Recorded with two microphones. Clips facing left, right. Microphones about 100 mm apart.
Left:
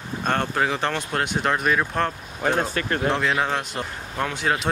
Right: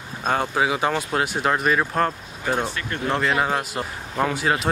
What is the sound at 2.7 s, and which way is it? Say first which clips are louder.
Speech: left 5 dB; 50° left (ahead or behind).